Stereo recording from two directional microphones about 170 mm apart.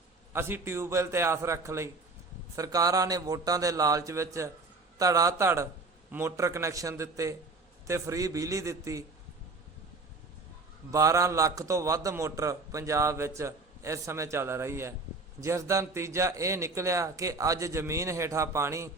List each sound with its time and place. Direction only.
0.3 s a man's voice: 15° right (ahead or behind)
10.9 s a man's voice: 20° right (ahead or behind)